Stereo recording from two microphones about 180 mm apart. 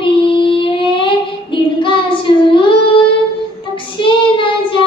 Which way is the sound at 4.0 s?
30° left (ahead or behind).